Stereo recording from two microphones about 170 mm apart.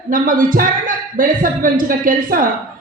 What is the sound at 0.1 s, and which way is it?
A man's voice, 55° right (ahead or behind).